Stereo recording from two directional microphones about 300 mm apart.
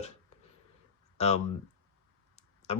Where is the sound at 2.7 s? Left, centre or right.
Left.